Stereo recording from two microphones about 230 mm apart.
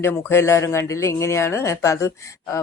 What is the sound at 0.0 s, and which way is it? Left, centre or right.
Speech, centre.